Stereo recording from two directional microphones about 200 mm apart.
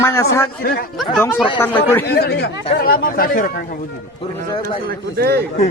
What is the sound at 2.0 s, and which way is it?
Speech, 55° left (ahead or behind).